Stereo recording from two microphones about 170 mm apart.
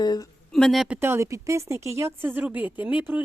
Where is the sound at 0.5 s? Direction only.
Centre (ahead or behind).